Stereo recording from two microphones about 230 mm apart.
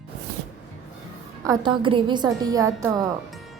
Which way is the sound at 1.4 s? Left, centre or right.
Centre.